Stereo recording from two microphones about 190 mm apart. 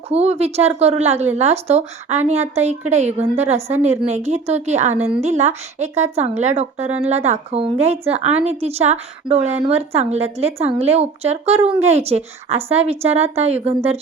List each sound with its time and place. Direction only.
0.1 s speech: 35° right (ahead or behind)